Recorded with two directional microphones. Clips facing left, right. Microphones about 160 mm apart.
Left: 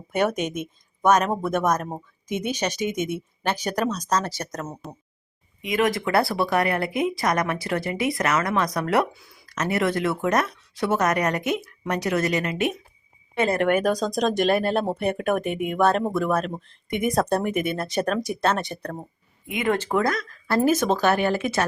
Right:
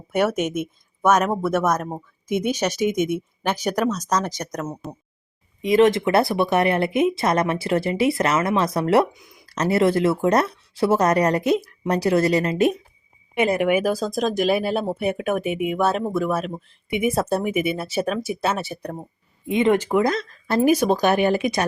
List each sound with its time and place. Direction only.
0.3 s speech: 10° right (ahead or behind)
2.2 s speech: 10° right (ahead or behind)
3.8 s speech: 10° left (ahead or behind)
4.1 s speech: 15° right (ahead or behind)
4.8 s speech: centre (ahead or behind)
5.6 s speech: 30° right (ahead or behind)
9.1 s speech: 20° right (ahead or behind)
9.5 s speech: 30° right (ahead or behind)
13.3 s speech: 15° right (ahead or behind)
19.5 s speech: 30° right (ahead or behind)
19.7 s speech: 15° right (ahead or behind)